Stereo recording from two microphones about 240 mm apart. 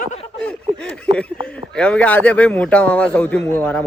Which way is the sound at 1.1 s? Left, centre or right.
Right.